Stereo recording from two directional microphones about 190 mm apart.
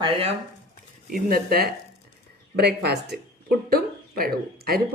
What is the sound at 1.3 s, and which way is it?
Speech, 55° right (ahead or behind).